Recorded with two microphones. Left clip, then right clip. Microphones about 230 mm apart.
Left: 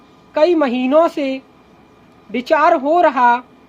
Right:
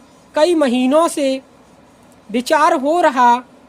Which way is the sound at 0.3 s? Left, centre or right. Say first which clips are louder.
Even; right.